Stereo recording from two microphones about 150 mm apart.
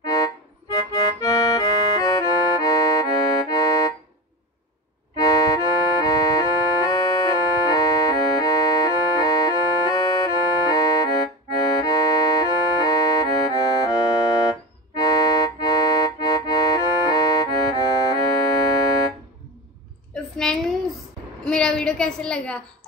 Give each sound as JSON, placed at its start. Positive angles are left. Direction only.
{"t": 0.0, "sound": "music", "side_deg": 25}
{"t": 5.1, "sound": "music", "side_deg": 25}
{"t": 21.5, "sound": "a sound", "side_deg": 5}